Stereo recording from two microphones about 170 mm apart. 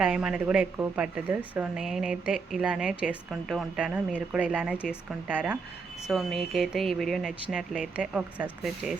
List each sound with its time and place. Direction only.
0.0 s speech: 5° right (ahead or behind)